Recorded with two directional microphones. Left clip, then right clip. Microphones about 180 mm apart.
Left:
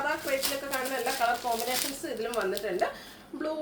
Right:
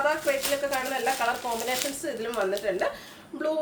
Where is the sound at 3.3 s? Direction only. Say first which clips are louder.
Right 4 dB; 20° right (ahead or behind).